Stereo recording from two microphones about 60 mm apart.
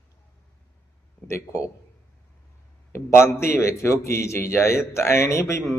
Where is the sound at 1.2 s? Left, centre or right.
Left.